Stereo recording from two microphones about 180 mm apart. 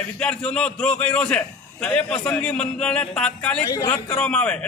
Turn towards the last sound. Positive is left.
turn(degrees=5)  # may be behind; listen again after turning